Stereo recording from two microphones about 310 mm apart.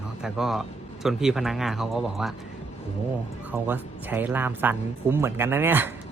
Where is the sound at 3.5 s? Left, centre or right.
Centre.